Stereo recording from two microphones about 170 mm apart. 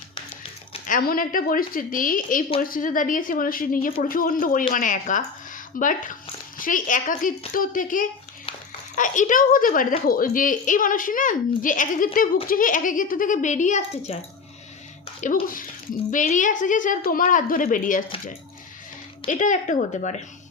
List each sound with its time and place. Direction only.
0.9 s speech: 55° left (ahead or behind); by 14.2 s 40° left (ahead or behind)
15.4 s speech: 55° left (ahead or behind)
19.3 s speech: 50° left (ahead or behind)